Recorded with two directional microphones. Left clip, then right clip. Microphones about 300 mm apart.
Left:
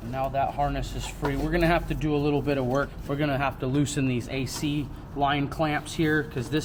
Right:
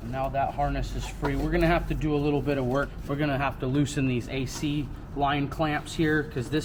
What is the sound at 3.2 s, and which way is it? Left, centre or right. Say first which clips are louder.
Speech: left 1 dB; centre.